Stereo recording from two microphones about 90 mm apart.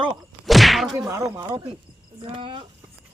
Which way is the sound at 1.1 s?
35° right (ahead or behind).